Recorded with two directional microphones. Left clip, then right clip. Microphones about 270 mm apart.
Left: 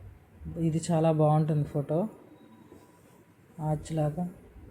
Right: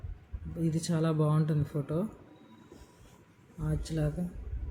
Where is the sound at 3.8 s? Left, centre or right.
Centre.